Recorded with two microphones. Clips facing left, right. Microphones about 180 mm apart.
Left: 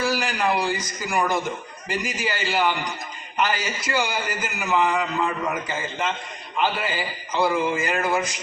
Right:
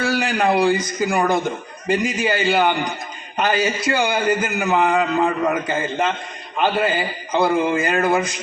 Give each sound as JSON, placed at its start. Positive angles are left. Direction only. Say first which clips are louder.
{"t": 0.0, "sound": "a man's voice", "louder": "right 4 dB", "side_deg": -60}